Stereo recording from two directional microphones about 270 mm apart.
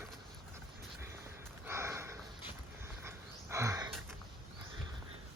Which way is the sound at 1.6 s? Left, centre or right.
Centre.